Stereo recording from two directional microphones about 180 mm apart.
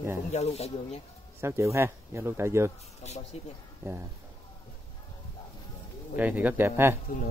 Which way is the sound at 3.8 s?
15° right (ahead or behind).